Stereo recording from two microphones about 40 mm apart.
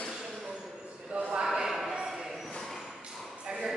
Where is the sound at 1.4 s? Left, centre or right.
Centre.